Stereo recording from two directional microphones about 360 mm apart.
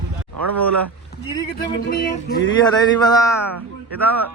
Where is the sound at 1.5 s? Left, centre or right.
Left.